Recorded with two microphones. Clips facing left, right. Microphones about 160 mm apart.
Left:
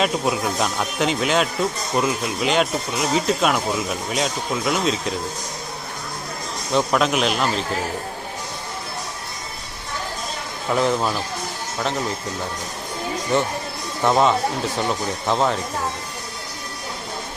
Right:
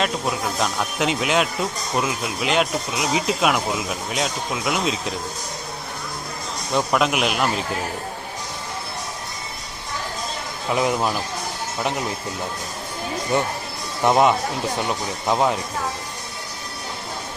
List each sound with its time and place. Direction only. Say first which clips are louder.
0.0 s speech: left 2 dB; centre (ahead or behind)
6.7 s a man's voice: left 1 dB; 5° right (ahead or behind)
10.7 s a man's voice: left 1 dB; 10° right (ahead or behind)
13.3 s a man's voice: left 1 dB; 15° right (ahead or behind)